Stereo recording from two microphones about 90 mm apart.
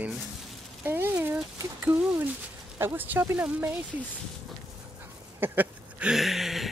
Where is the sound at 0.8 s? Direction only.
25° right (ahead or behind).